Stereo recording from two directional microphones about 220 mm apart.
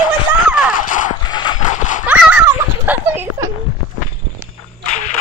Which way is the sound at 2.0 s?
5° right (ahead or behind).